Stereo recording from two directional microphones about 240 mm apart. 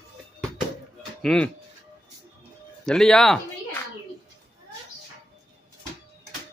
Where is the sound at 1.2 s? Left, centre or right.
Centre.